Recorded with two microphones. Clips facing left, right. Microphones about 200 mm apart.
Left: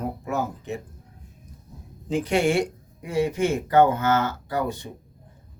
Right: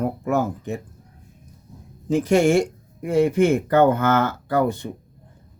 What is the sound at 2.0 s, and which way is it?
Speech, 45° right (ahead or behind).